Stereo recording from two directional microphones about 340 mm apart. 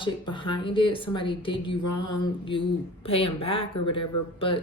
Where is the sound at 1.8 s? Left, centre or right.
Left.